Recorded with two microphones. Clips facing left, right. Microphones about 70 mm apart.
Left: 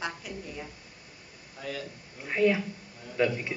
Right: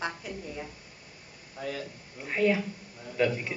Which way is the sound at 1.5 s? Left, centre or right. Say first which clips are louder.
Right 2 dB; right.